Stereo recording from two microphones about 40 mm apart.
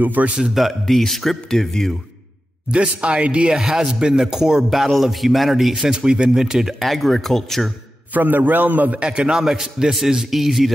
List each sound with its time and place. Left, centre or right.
0.0 s a man's voice: right
0.6 s a man's voice: centre
2.7 s speech: right
3.5 s a man's voice: centre
4.6 s speech: centre
5.9 s speech: right; by 7.7 s centre
8.1 s a man's voice: right
9.0 s a man's voice: right; by 10.7 s centre